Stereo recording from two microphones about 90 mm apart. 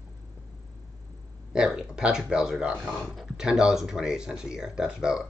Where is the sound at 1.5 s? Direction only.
10° right (ahead or behind).